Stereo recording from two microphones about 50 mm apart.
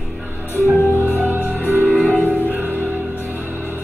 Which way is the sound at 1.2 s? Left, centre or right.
Right.